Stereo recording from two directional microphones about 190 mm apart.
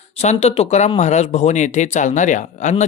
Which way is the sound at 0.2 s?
35° left (ahead or behind).